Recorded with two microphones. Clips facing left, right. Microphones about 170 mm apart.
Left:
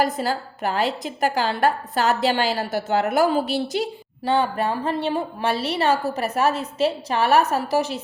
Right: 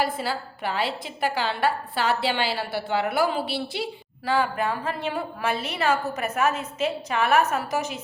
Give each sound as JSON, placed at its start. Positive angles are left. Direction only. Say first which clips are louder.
{"t": 0.0, "sound": "a woman's voice", "louder": "left 4 dB", "side_deg": 45}
{"t": 4.2, "sound": "a woman's voice", "louder": "left 3 dB", "side_deg": 30}